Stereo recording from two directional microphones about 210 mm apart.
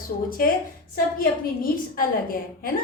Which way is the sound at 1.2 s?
45° left (ahead or behind).